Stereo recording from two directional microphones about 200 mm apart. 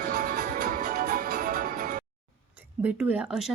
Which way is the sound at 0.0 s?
40° right (ahead or behind).